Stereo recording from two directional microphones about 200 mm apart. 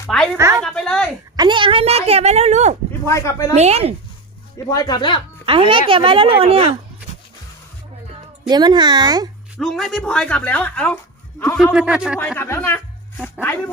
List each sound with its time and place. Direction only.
0.3 s a woman's voice: 15° right (ahead or behind)
0.6 s speech: 5° left (ahead or behind)
1.4 s speech: 25° right (ahead or behind)
3.1 s speech: 15° left (ahead or behind)
3.5 s speech: 30° right (ahead or behind)
4.7 s speech: 20° left (ahead or behind)
5.5 s speech: 25° right (ahead or behind)
8.4 s speech: 20° right (ahead or behind)
9.6 s speech: centre (ahead or behind)
11.7 s speech: 5° right (ahead or behind)
12.4 s speech: 10° left (ahead or behind)
13.1 s speech: 5° right (ahead or behind)